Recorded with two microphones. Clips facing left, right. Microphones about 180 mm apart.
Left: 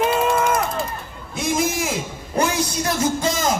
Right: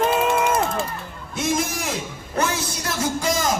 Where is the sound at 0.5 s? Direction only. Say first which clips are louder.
Even; 25° right (ahead or behind).